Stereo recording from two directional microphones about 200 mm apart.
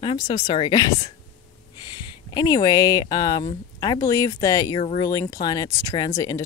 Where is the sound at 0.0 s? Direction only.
25° left (ahead or behind).